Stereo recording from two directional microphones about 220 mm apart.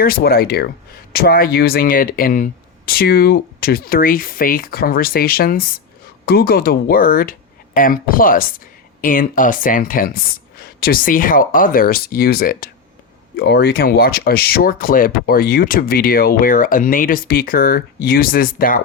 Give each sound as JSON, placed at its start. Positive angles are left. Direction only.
{"t": 0.0, "sound": "speech", "side_deg": 45}